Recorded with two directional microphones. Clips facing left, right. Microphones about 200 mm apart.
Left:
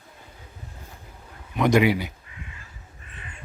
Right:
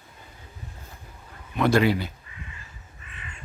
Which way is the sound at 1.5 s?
15° left (ahead or behind).